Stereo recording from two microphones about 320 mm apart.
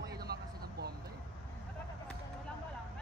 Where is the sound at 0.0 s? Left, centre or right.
Right.